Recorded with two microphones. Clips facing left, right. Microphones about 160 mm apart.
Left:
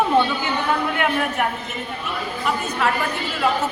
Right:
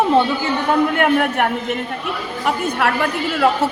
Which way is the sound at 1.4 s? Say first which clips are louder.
Right 5 dB; 65° right (ahead or behind).